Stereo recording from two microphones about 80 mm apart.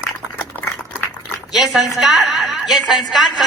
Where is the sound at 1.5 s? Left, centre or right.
Centre.